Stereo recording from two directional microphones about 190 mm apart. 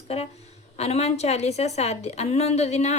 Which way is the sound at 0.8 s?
35° left (ahead or behind).